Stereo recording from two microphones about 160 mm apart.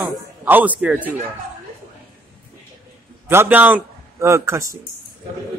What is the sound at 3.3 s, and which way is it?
A man's voice, 10° right (ahead or behind).